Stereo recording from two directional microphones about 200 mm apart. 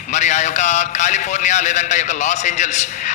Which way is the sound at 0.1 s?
35° left (ahead or behind).